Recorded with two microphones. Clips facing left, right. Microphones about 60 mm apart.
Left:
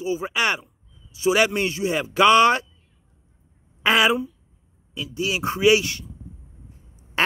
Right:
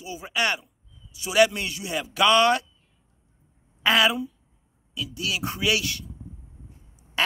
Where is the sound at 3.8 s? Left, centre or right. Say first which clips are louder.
Left 2 dB; left.